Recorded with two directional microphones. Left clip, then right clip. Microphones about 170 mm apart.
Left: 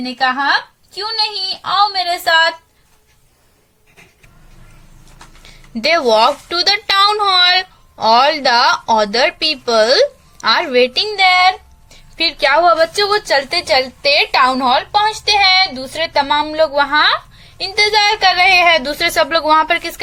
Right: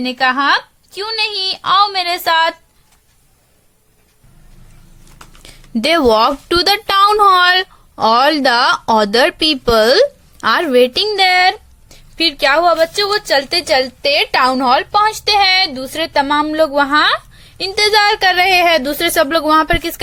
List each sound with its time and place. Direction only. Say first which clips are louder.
0.0 s a woman's voice: right 2 dB; 40° right (ahead or behind)
5.4 s speech: right 1 dB; 55° right (ahead or behind)